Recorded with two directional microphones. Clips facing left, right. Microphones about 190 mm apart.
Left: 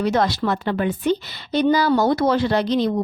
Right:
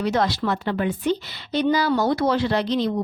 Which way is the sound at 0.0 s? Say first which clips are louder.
Left 2 dB; 50° left (ahead or behind).